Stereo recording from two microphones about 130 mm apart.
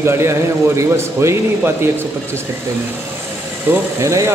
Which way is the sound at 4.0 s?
25° right (ahead or behind).